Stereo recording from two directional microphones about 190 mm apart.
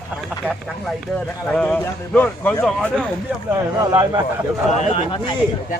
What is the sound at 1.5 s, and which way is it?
A man's voice, 5° left (ahead or behind).